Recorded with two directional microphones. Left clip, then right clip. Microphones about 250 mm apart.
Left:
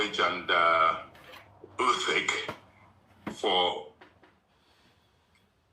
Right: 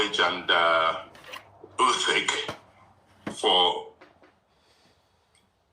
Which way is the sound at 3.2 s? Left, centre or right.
Centre.